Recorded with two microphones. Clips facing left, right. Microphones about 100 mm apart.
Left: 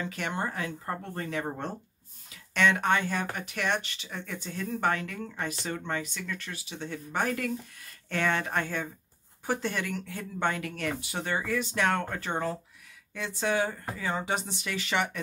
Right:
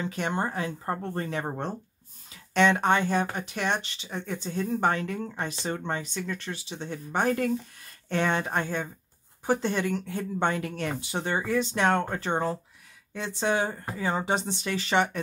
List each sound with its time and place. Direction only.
0.0 s speech: 25° right (ahead or behind)